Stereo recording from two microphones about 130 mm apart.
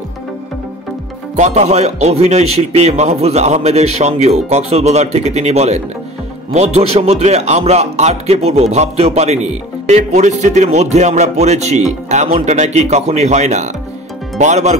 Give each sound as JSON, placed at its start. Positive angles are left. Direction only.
{"t": 1.3, "sound": "a man's voice", "side_deg": -60}